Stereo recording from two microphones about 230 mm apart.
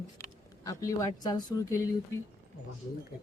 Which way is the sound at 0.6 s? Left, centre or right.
Centre.